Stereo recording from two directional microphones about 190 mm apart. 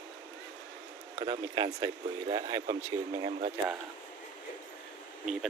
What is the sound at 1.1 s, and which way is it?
Speech, 25° right (ahead or behind).